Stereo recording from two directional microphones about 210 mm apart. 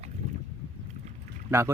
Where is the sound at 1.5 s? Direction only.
15° right (ahead or behind).